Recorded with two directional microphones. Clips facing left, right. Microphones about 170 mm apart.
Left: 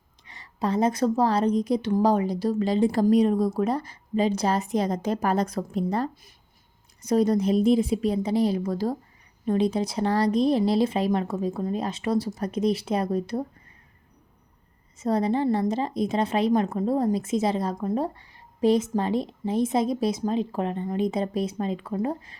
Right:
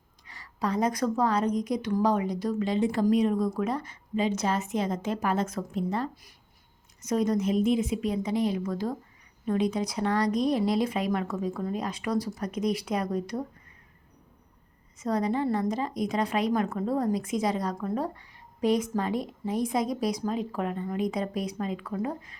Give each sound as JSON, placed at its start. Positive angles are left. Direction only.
{"t": 0.3, "sound": "a woman's voice", "side_deg": 25}
{"t": 14.9, "sound": "a woman's voice", "side_deg": 30}